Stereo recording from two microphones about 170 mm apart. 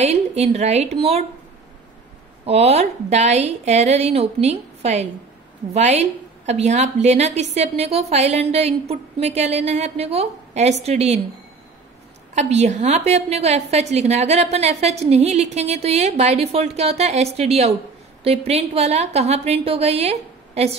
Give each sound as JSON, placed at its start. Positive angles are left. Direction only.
{"t": 0.0, "sound": "a woman's voice", "side_deg": -40}
{"t": 2.4, "sound": "a woman's voice", "side_deg": -35}
{"t": 12.4, "sound": "a woman's voice", "side_deg": -45}